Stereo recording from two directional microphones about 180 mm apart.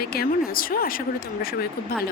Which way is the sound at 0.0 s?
55° left (ahead or behind).